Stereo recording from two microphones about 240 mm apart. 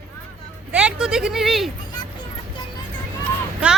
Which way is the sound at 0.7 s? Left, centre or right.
Centre.